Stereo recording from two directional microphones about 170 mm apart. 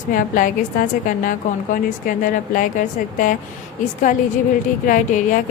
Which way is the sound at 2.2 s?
50° left (ahead or behind).